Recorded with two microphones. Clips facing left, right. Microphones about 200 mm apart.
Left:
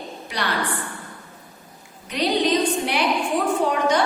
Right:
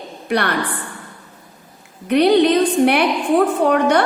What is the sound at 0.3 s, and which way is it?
Speech, 60° right (ahead or behind).